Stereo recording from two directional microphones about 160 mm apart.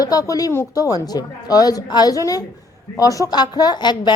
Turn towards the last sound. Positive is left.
turn(degrees=25)  # may be behind; listen again after turning